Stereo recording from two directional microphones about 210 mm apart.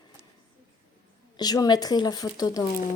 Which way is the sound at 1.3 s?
20° left (ahead or behind).